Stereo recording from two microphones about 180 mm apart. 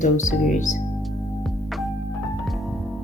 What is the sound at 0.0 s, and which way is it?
Speech, 45° left (ahead or behind).